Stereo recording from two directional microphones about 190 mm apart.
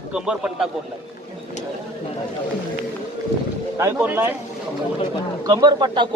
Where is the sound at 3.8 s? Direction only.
15° right (ahead or behind).